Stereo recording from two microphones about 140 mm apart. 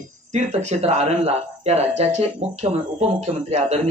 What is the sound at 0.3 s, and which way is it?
Speech, 50° right (ahead or behind).